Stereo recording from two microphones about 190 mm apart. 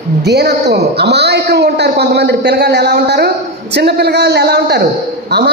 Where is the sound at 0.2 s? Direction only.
60° right (ahead or behind).